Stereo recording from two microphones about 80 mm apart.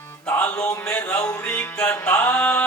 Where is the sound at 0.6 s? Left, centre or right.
Centre.